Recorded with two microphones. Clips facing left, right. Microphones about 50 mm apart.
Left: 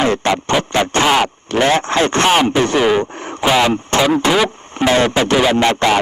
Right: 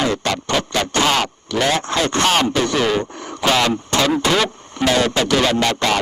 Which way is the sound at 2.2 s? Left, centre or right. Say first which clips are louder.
Left 3 dB; centre.